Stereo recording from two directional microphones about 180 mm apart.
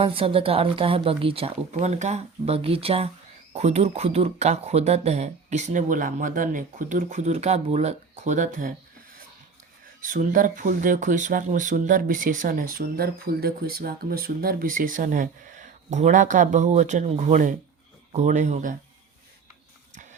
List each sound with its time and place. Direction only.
0.0 s speech: 30° right (ahead or behind)
10.0 s speech: 50° right (ahead or behind)